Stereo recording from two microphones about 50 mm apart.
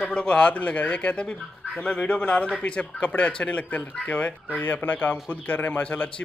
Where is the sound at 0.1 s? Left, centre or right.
Left.